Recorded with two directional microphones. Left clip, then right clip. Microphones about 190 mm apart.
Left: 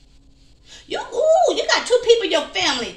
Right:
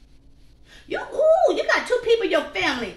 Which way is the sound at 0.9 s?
30° right (ahead or behind).